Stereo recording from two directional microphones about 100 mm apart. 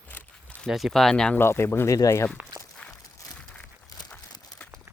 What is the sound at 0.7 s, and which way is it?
Speech, centre (ahead or behind).